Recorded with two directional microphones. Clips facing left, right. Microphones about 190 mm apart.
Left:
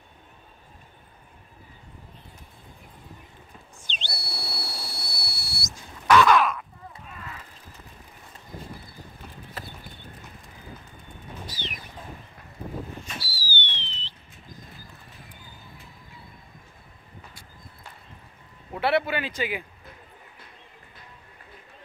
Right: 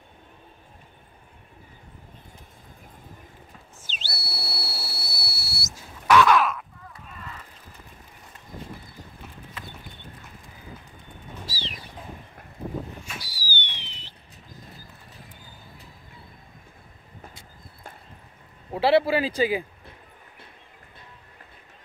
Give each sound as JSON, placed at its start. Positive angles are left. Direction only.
{"t": 3.9, "sound": "whistle", "side_deg": -5}
{"t": 5.8, "sound": "crow", "side_deg": -5}
{"t": 9.6, "sound": "clip-clop", "side_deg": 40}
{"t": 11.4, "sound": "bird", "side_deg": -30}
{"t": 13.0, "sound": "a sound", "side_deg": -15}
{"t": 18.7, "sound": "a man's voice", "side_deg": -30}